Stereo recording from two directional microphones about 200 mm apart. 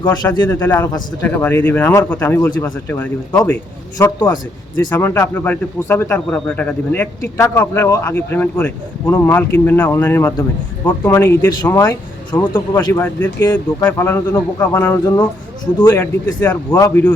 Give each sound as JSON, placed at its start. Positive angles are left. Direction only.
{"t": 0.0, "sound": "speech", "side_deg": 20}
{"t": 0.4, "sound": "speech", "side_deg": 10}